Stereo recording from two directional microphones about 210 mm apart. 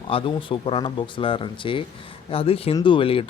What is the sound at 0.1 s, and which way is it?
Speech, 25° left (ahead or behind).